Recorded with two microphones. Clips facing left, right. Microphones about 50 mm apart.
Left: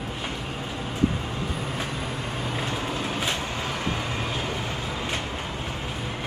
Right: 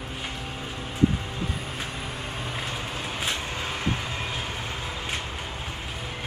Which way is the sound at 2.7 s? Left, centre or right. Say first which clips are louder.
Left 4 dB; left.